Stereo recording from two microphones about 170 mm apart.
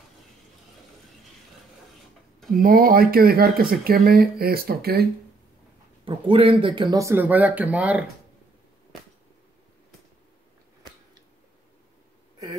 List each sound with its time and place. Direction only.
2.5 s speech: 55° right (ahead or behind)
6.0 s speech: 30° right (ahead or behind); by 8.0 s 10° right (ahead or behind)